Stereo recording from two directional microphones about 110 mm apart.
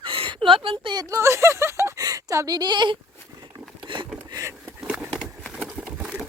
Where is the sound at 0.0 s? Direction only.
50° right (ahead or behind).